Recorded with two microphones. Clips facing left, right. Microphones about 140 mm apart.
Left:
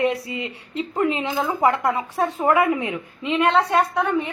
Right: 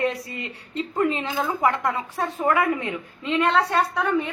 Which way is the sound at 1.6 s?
30° left (ahead or behind).